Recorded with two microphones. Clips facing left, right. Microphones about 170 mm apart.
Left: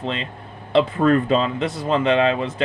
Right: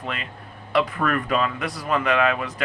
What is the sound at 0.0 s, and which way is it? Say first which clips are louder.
Speech: left 5 dB; 25° left (ahead or behind).